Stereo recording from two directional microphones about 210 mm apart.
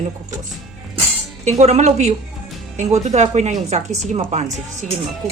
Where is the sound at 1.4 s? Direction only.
35° right (ahead or behind).